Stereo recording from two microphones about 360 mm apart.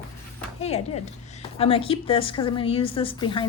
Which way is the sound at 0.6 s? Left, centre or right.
Centre.